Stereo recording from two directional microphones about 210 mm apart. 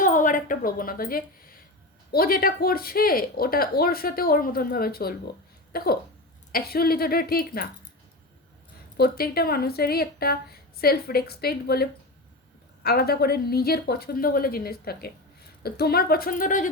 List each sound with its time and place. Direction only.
0.0 s a sound: 40° left (ahead or behind)
2.1 s speech: 45° left (ahead or behind)
9.0 s speech: 45° left (ahead or behind)